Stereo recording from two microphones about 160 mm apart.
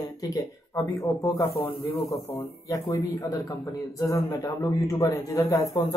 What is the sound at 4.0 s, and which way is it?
Speech, 20° left (ahead or behind).